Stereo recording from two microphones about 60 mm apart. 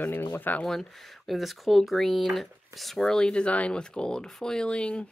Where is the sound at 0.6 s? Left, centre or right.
Centre.